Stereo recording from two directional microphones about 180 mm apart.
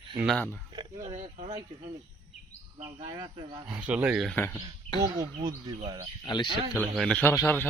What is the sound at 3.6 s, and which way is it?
Speech, 5° right (ahead or behind).